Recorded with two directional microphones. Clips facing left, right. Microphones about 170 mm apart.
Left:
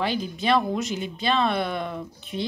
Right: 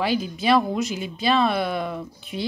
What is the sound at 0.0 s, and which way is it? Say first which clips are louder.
A woman's voice: right 3 dB; 5° right (ahead or behind).